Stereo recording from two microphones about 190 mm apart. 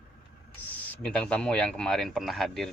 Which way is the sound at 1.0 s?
5° left (ahead or behind).